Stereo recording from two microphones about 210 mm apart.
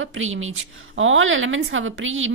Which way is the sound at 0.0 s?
70° right (ahead or behind).